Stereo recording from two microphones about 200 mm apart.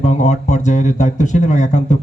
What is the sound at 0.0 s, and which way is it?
A man's voice, 35° left (ahead or behind).